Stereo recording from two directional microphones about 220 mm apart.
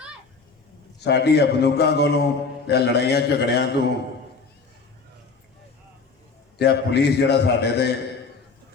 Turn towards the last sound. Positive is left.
turn(degrees=50)  # may be behind; listen again after turning